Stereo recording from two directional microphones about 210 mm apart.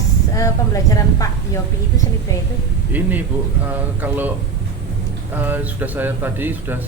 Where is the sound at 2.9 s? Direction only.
10° right (ahead or behind).